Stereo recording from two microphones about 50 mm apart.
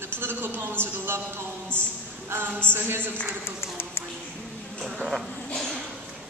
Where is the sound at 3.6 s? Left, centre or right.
Left.